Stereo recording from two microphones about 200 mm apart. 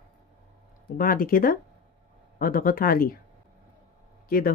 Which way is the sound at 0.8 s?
45° left (ahead or behind).